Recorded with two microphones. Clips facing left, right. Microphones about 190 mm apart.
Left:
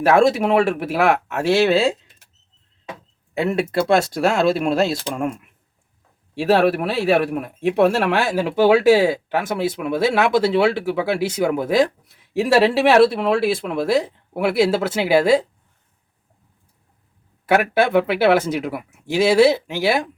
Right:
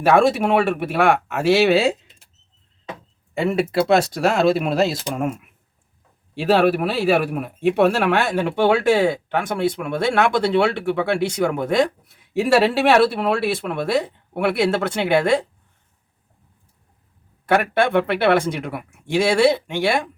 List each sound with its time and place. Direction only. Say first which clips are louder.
0.0 s speech: left 1 dB; centre (ahead or behind)
2.9 s speech: left 1 dB; centre (ahead or behind)
17.4 s speech: left 1 dB; 5° left (ahead or behind)